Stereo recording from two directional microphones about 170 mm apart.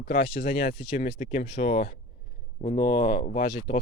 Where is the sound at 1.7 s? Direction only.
50° left (ahead or behind).